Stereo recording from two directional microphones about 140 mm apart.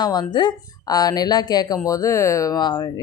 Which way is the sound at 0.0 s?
30° left (ahead or behind).